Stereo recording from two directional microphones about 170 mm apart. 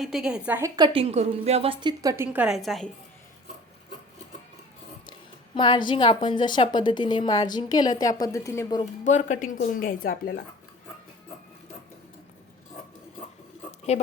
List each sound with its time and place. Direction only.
0.0 s a woman's voice: centre (ahead or behind)
0.8 s a woman's voice: 35° right (ahead or behind)
1.8 s a woman's voice: 25° right (ahead or behind); by 2.9 s centre (ahead or behind)
5.5 s a woman's voice: 25° left (ahead or behind)
9.0 s speech: 45° left (ahead or behind)
13.7 s a sound: 40° left (ahead or behind)